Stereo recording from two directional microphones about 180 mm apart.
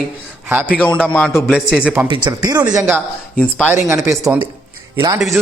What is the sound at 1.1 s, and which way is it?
Speech, 10° left (ahead or behind).